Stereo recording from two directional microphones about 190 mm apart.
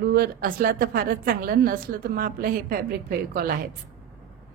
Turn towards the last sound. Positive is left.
turn(degrees=-50)  # may be behind; listen again after turning